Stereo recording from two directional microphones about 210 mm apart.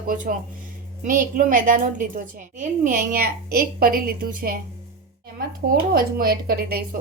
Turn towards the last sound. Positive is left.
turn(degrees=-45)  # may be behind; listen again after turning